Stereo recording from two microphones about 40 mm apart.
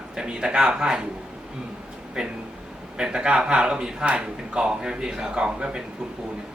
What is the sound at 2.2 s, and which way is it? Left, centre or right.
Speech, centre.